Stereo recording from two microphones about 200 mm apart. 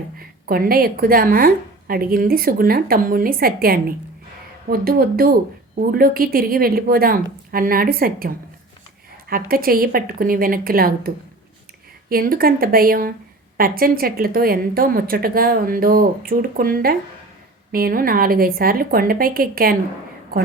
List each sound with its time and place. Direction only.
0.2 s a woman's voice: 45° right (ahead or behind)